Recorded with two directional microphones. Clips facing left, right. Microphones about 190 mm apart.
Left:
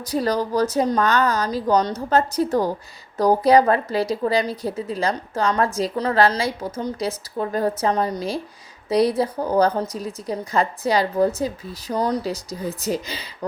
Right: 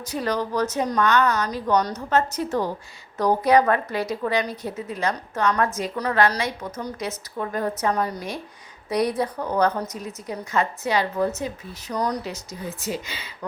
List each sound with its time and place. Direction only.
0.0 s a woman's voice: 35° left (ahead or behind)